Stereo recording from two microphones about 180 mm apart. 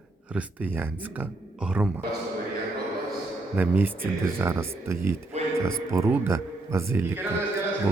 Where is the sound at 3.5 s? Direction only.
10° right (ahead or behind).